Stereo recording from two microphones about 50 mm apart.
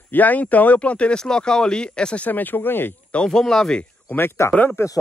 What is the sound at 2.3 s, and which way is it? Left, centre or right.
Speech, left.